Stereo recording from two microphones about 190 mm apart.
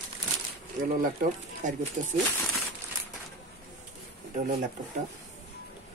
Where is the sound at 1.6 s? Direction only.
40° right (ahead or behind).